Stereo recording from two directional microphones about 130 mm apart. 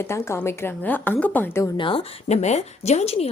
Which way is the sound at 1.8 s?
40° left (ahead or behind).